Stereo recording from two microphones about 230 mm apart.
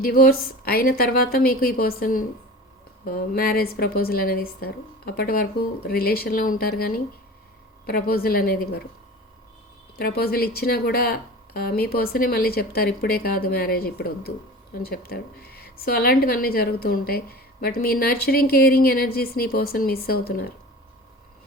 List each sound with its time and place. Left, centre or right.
0.0 s speech: left
10.0 s speech: left